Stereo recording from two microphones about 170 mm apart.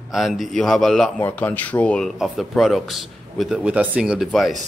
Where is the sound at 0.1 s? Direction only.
Centre (ahead or behind).